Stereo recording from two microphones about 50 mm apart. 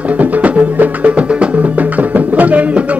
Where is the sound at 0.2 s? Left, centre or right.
Right.